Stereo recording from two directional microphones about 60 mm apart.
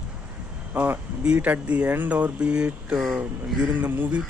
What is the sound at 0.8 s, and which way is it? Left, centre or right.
Speech, centre.